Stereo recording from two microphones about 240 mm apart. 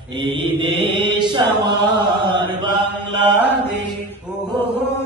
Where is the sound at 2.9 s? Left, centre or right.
Centre.